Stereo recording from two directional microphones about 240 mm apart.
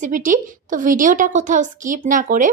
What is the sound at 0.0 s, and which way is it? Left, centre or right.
A woman's voice, right.